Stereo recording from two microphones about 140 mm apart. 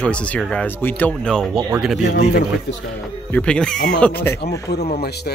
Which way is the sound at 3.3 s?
10° left (ahead or behind).